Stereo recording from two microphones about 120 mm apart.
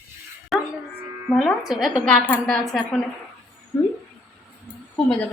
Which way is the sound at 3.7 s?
20° left (ahead or behind).